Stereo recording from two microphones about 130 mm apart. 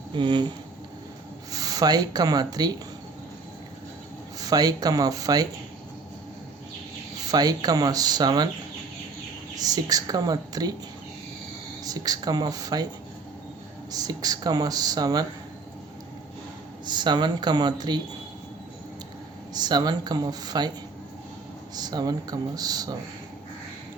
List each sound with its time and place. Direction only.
0.1 s speech: 35° right (ahead or behind)
1.5 s speech: 30° right (ahead or behind)
4.4 s speech: 30° right (ahead or behind)
7.3 s speech: 30° right (ahead or behind)
9.6 s speech: 30° right (ahead or behind)
11.8 s speech: 30° right (ahead or behind)
13.9 s speech: 30° right (ahead or behind)
16.8 s speech: 35° right (ahead or behind)
19.5 s speech: 30° right (ahead or behind)
21.8 s speech: 30° right (ahead or behind)